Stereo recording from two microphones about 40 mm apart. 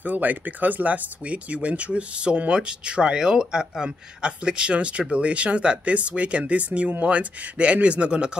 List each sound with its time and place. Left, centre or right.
0.0 s speech: right